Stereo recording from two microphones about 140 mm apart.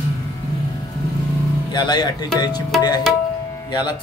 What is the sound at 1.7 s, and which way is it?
Speech, 30° left (ahead or behind).